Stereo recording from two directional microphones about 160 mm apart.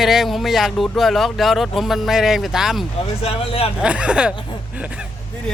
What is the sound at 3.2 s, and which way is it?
Speech, 35° left (ahead or behind).